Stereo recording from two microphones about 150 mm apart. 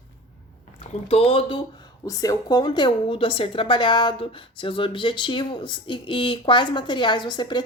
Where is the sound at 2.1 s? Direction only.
25° left (ahead or behind).